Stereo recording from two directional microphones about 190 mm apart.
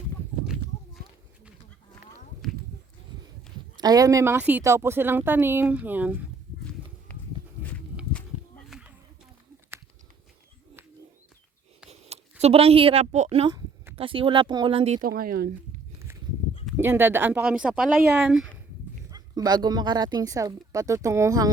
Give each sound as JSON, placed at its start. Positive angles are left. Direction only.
{"t": 3.8, "sound": "a woman's voice", "side_deg": -20}
{"t": 7.1, "sound": "a sound", "side_deg": 10}
{"t": 11.9, "sound": "speech", "side_deg": -35}
{"t": 15.0, "sound": "speech", "side_deg": -50}
{"t": 16.7, "sound": "a woman's voice", "side_deg": -10}
{"t": 19.1, "sound": "speech", "side_deg": -20}